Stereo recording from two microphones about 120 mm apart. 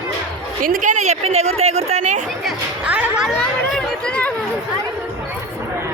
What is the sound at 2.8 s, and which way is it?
Speech, 5° right (ahead or behind).